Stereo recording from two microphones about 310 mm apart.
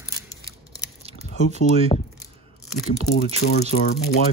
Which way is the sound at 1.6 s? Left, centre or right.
Left.